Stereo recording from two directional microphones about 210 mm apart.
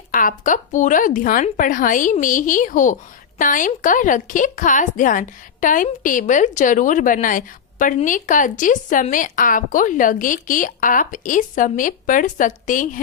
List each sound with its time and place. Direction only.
0.1 s a woman's voice: 40° left (ahead or behind)